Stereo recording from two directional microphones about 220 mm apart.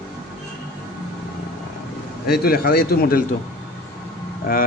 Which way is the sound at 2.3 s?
45° left (ahead or behind).